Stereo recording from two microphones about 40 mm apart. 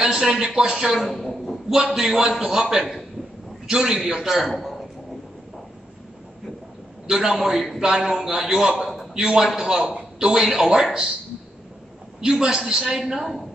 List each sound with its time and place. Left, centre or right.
0.0 s a man's voice: centre
2.0 s a man's voice: centre
3.6 s a man's voice: centre
4.6 s a sound: centre
7.1 s a man's voice: centre
8.8 s a sound: centre
9.1 s a man's voice: centre
12.2 s a man's voice: centre
13.0 s a man's voice: centre